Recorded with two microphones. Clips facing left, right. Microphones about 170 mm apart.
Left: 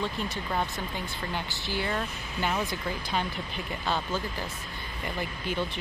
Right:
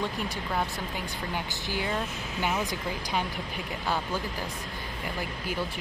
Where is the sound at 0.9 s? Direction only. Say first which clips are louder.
Right 1 dB; 10° right (ahead or behind).